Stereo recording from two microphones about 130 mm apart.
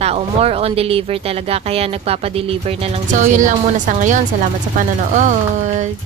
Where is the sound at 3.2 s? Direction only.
70° right (ahead or behind).